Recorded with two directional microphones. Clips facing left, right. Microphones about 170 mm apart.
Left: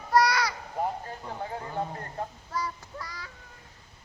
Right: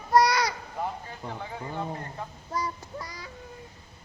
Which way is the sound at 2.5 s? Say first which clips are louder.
Right 2 dB; 15° right (ahead or behind).